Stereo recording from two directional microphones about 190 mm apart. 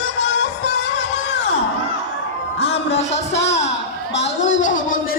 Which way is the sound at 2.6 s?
35° left (ahead or behind).